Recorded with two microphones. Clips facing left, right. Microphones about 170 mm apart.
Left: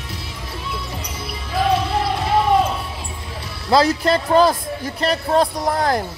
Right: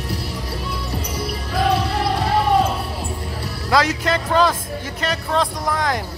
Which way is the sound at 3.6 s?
30° left (ahead or behind).